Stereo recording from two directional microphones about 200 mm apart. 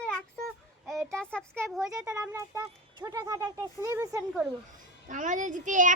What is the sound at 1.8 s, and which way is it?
Speech, 15° right (ahead or behind).